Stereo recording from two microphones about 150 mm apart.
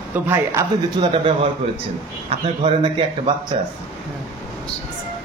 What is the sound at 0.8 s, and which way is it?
Speech, 35° right (ahead or behind).